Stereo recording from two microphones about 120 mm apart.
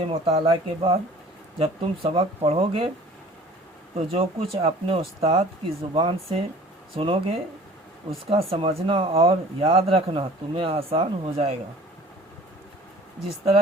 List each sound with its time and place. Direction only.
0.1 s speech: 50° right (ahead or behind)
3.9 s speech: 55° right (ahead or behind)